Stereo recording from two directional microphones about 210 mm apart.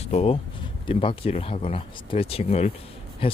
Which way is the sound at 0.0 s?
30° left (ahead or behind).